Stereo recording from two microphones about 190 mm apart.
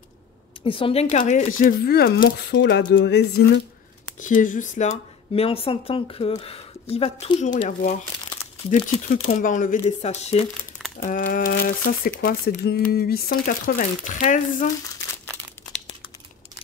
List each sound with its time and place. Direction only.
0.7 s speech: 30° left (ahead or behind)
1.9 s speech: 55° left (ahead or behind)
4.2 s speech: 45° left (ahead or behind)
9.0 s speech: 40° left (ahead or behind)